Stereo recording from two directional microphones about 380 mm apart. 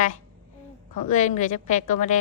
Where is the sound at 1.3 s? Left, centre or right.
Centre.